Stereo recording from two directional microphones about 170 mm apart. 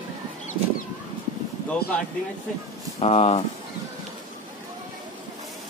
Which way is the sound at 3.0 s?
40° left (ahead or behind).